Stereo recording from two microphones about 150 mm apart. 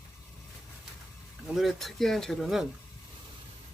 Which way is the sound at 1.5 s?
Centre (ahead or behind).